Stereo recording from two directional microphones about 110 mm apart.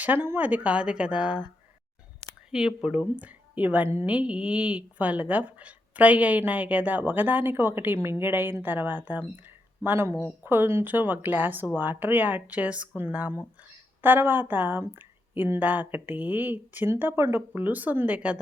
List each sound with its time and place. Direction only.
0.0 s speech: 15° right (ahead or behind)
2.5 s speech: 5° right (ahead or behind)